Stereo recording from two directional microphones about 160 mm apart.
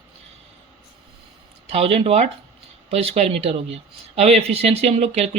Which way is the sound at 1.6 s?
40° right (ahead or behind).